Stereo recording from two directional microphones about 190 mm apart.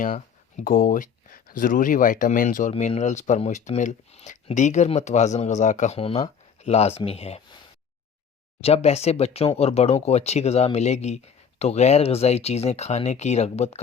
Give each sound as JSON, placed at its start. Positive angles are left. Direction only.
{"t": 0.0, "sound": "speech", "side_deg": 40}
{"t": 8.6, "sound": "speech", "side_deg": 35}